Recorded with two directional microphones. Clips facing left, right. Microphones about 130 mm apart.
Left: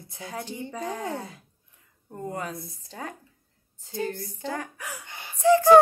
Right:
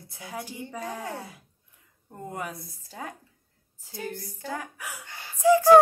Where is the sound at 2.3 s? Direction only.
10° right (ahead or behind).